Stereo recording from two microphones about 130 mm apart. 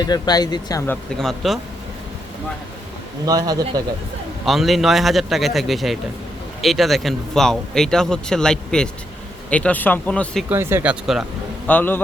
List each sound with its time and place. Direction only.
0.0 s speech: 30° left (ahead or behind)
1.1 s speech: centre (ahead or behind)
3.2 s speech: 30° right (ahead or behind)
4.4 s speech: centre (ahead or behind)
10.5 s speech: 20° right (ahead or behind)
11.0 s speech: centre (ahead or behind)
11.7 s speech: 15° left (ahead or behind)